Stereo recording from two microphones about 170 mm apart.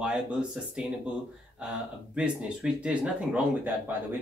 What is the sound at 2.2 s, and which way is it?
Speech, 5° right (ahead or behind).